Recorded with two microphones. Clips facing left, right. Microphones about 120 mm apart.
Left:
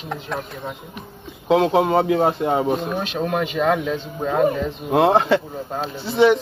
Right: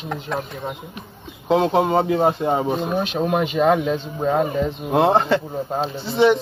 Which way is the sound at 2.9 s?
15° right (ahead or behind).